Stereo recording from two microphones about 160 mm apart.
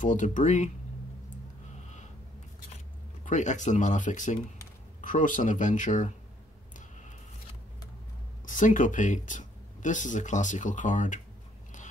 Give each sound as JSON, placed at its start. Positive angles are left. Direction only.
{"t": 0.0, "sound": "speech", "side_deg": 50}
{"t": 3.3, "sound": "speech", "side_deg": 50}
{"t": 8.5, "sound": "speech", "side_deg": 55}